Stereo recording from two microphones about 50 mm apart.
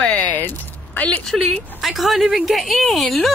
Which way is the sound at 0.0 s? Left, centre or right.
Centre.